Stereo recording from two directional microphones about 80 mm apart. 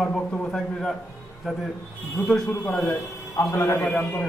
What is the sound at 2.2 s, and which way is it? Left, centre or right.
Speech, centre.